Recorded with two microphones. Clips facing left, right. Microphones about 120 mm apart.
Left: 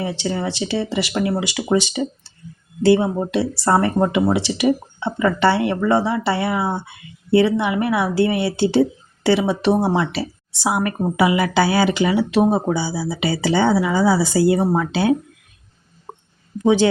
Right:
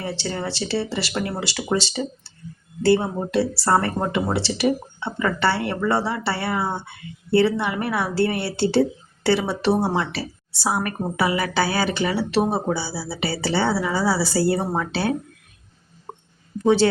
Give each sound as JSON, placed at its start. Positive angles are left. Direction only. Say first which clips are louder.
{"t": 0.0, "sound": "speech", "louder": "left 4 dB", "side_deg": 15}
{"t": 16.6, "sound": "speech", "louder": "left 2 dB", "side_deg": 15}